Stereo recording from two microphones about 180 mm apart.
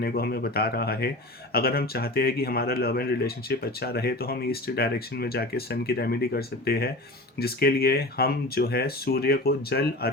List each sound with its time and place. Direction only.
0.0 s speech: 60° left (ahead or behind)